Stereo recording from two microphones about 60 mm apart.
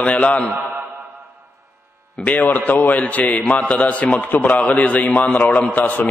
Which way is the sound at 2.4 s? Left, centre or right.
Left.